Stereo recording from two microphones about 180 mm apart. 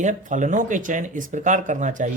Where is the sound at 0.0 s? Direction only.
45° right (ahead or behind).